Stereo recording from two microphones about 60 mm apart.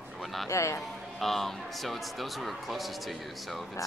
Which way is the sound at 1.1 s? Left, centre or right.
Centre.